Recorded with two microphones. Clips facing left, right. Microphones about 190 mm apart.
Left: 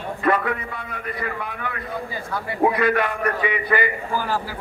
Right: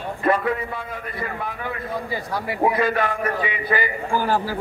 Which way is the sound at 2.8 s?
65° left (ahead or behind).